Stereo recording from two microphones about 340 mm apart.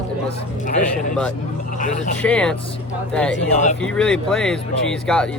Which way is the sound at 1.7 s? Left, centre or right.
Left.